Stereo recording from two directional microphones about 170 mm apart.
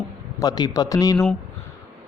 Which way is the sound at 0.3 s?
25° left (ahead or behind).